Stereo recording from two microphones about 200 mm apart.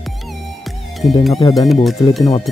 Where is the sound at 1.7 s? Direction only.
Centre (ahead or behind).